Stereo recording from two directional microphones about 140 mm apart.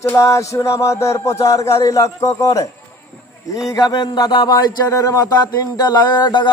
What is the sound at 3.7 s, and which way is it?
Speech, 30° left (ahead or behind).